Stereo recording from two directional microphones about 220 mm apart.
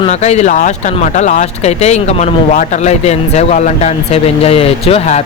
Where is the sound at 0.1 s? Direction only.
30° left (ahead or behind).